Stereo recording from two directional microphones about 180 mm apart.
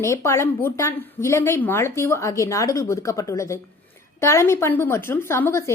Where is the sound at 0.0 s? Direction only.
15° left (ahead or behind).